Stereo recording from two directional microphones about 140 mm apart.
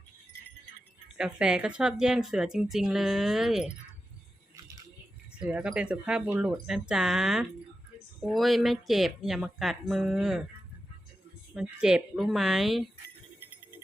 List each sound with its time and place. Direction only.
1.1 s speech: 5° right (ahead or behind)
5.4 s speech: 5° right (ahead or behind)
11.5 s speech: 5° right (ahead or behind)